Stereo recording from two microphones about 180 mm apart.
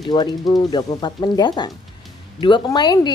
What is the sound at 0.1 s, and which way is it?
A woman's voice, 25° left (ahead or behind).